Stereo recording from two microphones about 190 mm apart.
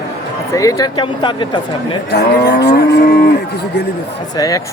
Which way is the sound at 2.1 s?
60° left (ahead or behind).